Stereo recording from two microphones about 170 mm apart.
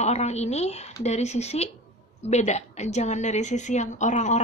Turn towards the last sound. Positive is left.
turn(degrees=45)  # may be behind; listen again after turning